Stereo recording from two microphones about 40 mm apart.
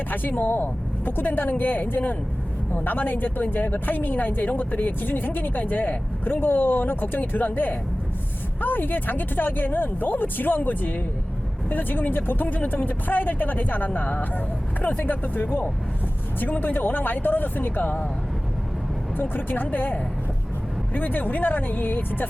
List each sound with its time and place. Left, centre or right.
0.1 s speech: left
19.1 s speech: left